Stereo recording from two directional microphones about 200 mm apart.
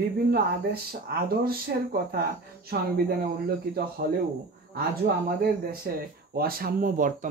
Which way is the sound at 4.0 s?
50° right (ahead or behind).